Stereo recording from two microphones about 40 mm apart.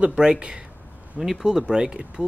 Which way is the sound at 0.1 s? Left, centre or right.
Right.